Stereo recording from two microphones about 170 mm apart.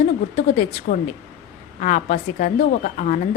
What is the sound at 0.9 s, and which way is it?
A woman's voice, 55° left (ahead or behind).